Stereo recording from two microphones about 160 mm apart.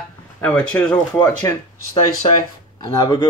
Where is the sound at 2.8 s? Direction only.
25° left (ahead or behind).